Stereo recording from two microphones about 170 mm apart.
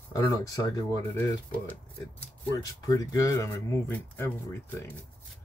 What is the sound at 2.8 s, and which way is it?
Speech, 20° left (ahead or behind).